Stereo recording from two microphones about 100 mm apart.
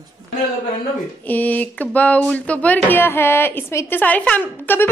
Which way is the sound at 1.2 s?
15° left (ahead or behind).